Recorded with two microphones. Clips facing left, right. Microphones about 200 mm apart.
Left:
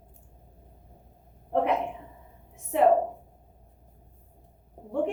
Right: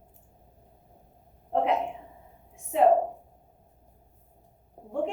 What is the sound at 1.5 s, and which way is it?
Speech, 60° left (ahead or behind).